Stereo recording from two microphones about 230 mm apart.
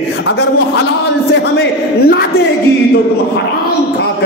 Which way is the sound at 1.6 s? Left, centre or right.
Left.